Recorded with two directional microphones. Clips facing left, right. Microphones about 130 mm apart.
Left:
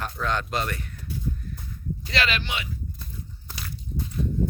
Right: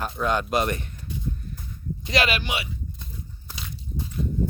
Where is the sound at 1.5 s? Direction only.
20° right (ahead or behind).